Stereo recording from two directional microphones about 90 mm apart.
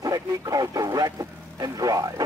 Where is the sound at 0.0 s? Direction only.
40° right (ahead or behind).